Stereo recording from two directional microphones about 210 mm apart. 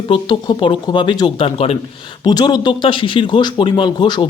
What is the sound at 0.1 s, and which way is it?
Speech, 20° left (ahead or behind).